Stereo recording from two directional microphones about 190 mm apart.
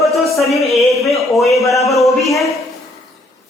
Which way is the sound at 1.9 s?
Centre (ahead or behind).